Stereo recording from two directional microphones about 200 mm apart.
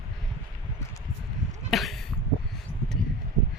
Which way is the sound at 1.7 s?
Centre (ahead or behind).